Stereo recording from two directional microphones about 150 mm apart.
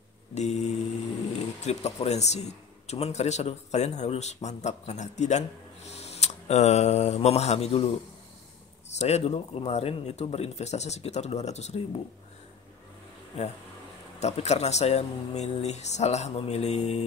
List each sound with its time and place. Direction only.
0.3 s mantra: 50° left (ahead or behind)
1.6 s speech: 45° left (ahead or behind)
5.9 s mantra: 45° left (ahead or behind)
8.9 s speech: 45° left (ahead or behind)
13.4 s speech: 45° left (ahead or behind)